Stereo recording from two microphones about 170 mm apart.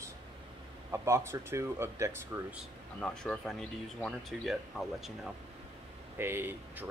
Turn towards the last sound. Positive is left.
turn(degrees=-15)  # may be behind; listen again after turning